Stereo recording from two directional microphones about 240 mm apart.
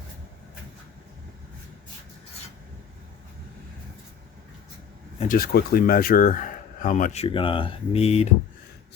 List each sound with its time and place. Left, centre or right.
5.3 s speech: left